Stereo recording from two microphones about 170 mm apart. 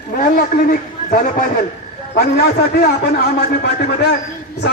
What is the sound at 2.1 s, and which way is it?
A man's voice, 70° left (ahead or behind).